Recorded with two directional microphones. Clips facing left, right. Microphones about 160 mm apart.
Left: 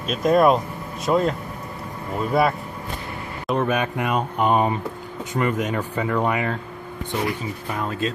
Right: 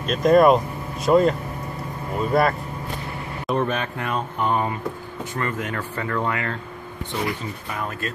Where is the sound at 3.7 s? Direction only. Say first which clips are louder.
Left 4 dB; 15° left (ahead or behind).